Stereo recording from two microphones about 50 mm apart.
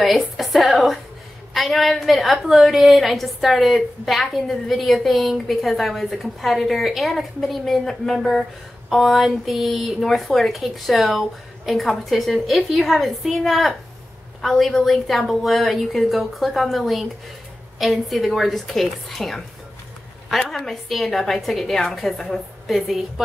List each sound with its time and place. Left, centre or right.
0.0 s a woman's voice: centre
22.8 s a woman's voice: centre